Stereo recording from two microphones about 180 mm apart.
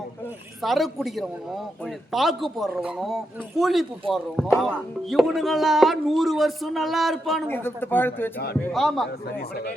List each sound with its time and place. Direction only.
0.6 s a man's voice: centre (ahead or behind)
7.4 s a man's voice: 10° left (ahead or behind)
9.2 s speech: 60° left (ahead or behind)